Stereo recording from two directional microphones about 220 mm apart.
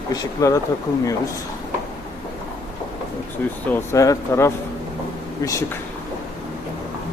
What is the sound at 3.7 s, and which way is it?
Speech, 15° left (ahead or behind).